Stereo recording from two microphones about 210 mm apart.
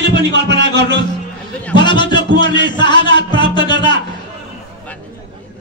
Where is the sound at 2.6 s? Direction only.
20° left (ahead or behind).